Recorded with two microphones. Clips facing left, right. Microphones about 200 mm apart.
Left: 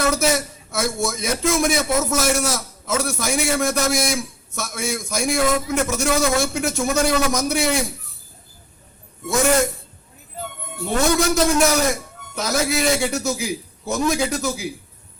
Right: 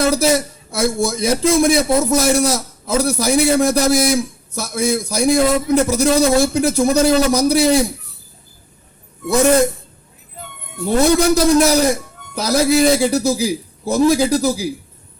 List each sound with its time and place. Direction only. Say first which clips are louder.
0.0 s a man's voice: right 5 dB; 35° right (ahead or behind)
9.2 s a man's voice: right 5 dB; 35° right (ahead or behind)
10.9 s a man's voice: right 5 dB; 35° right (ahead or behind)